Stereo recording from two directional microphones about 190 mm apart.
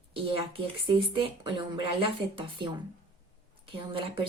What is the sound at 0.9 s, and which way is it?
Speech, 25° right (ahead or behind).